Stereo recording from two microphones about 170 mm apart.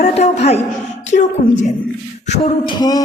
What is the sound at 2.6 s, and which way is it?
Beatboxing, 25° left (ahead or behind).